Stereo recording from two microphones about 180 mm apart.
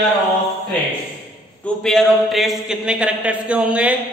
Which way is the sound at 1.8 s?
Centre (ahead or behind).